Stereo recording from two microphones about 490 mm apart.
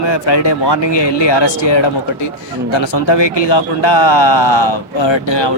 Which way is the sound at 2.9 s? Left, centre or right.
Left.